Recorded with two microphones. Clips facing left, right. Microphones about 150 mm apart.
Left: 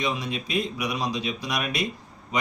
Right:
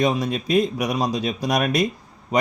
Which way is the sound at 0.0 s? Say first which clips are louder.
Right 7 dB; 45° right (ahead or behind).